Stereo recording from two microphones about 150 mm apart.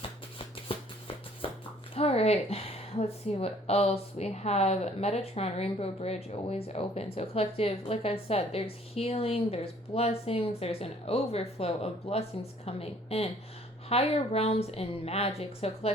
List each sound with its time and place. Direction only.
0.3 s shuffling cards: 35° left (ahead or behind)
2.0 s a woman's voice: 45° left (ahead or behind)